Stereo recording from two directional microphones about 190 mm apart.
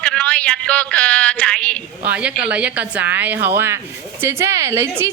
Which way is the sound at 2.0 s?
5° right (ahead or behind).